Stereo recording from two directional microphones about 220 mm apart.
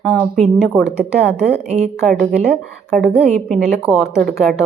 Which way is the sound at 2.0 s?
Centre (ahead or behind).